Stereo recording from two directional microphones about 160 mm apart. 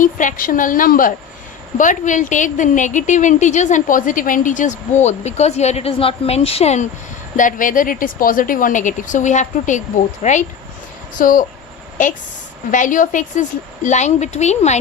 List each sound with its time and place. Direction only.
0.0 s a woman's voice: 55° left (ahead or behind)
7.3 s a woman's voice: 55° left (ahead or behind)